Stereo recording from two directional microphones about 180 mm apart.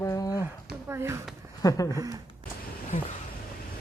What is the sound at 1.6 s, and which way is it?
Speech, 20° left (ahead or behind).